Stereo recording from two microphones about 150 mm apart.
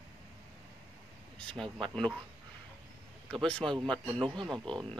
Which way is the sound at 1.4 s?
5° left (ahead or behind).